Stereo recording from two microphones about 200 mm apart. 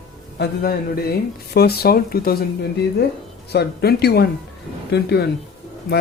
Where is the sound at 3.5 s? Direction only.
55° left (ahead or behind).